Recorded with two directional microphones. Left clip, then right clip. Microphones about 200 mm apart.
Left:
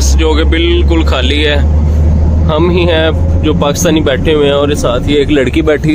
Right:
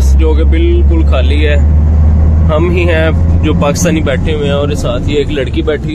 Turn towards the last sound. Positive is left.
turn(degrees=25)  # may be behind; listen again after turning